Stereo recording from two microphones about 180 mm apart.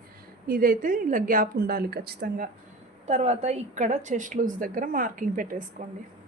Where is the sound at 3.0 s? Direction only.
35° right (ahead or behind).